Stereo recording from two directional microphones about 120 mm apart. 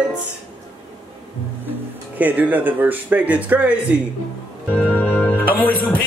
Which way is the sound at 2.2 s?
15° right (ahead or behind).